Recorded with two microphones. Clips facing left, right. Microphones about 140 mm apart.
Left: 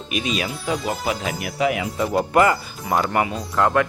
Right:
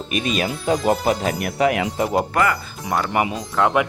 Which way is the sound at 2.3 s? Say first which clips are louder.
Left 3 dB; 25° left (ahead or behind).